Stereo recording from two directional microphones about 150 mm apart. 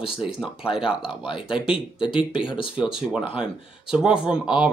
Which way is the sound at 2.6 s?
5° right (ahead or behind).